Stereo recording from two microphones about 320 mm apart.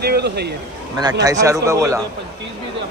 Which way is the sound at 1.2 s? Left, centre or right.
Centre.